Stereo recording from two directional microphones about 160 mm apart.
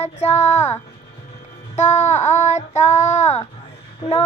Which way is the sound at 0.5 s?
45° left (ahead or behind).